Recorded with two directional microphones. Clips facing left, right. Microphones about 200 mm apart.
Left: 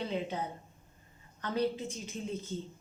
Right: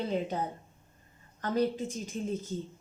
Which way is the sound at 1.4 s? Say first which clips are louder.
Right 3 dB; 45° right (ahead or behind).